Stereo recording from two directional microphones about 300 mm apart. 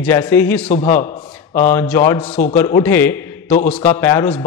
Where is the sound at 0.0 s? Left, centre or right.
Centre.